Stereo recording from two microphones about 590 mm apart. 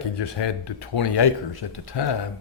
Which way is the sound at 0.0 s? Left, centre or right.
Left.